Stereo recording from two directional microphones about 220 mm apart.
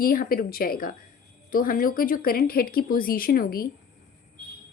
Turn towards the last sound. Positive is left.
turn(degrees=40)  # may be behind; listen again after turning